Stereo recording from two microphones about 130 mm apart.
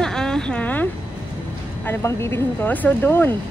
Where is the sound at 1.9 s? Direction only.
20° left (ahead or behind).